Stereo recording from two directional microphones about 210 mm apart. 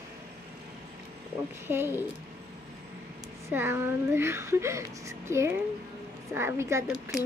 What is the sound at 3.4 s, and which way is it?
Speech, 10° right (ahead or behind).